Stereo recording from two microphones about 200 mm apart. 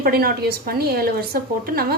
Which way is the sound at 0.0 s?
50° right (ahead or behind).